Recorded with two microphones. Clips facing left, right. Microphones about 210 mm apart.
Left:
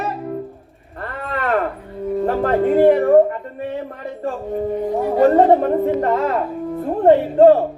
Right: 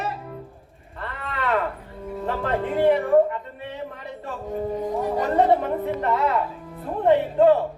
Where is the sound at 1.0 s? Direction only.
50° left (ahead or behind).